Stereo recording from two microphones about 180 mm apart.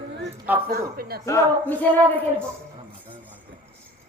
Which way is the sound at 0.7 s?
60° right (ahead or behind).